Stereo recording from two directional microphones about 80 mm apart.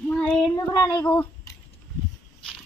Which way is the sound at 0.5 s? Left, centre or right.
Left.